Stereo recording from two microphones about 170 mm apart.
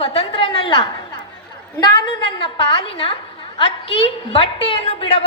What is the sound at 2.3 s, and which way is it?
A woman's voice, 30° left (ahead or behind).